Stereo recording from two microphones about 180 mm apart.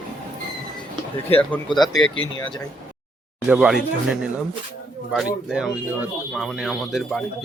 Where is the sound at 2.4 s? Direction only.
25° left (ahead or behind).